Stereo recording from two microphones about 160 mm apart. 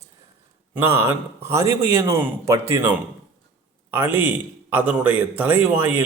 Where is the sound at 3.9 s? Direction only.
15° right (ahead or behind).